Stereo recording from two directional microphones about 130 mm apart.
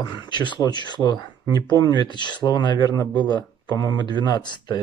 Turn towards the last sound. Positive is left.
turn(degrees=35)  # may be behind; listen again after turning